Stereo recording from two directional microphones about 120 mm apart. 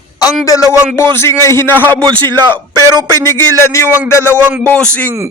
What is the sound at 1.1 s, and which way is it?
A man's voice, 20° left (ahead or behind).